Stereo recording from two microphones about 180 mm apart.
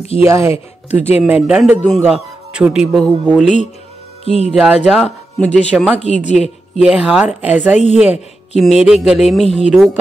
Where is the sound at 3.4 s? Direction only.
40° left (ahead or behind).